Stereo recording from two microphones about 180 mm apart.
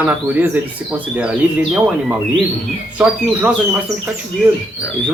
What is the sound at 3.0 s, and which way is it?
Speech, 5° right (ahead or behind).